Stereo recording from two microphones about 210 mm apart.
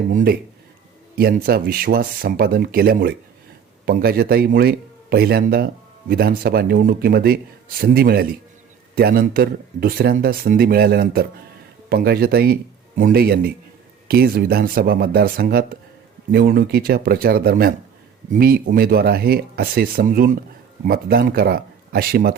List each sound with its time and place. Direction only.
0.1 s speech: 40° right (ahead or behind)